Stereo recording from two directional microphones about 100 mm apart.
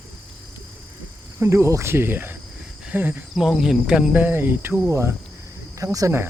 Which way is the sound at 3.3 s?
5° right (ahead or behind).